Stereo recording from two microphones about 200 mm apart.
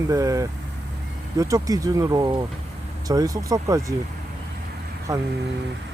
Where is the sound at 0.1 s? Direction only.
15° right (ahead or behind).